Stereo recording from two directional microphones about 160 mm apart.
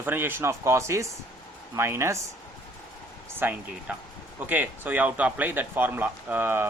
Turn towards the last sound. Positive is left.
turn(degrees=-15)  # may be behind; listen again after turning